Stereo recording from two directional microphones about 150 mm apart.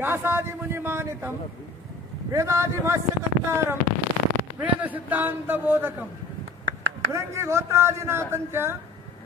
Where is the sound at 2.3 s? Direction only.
20° right (ahead or behind).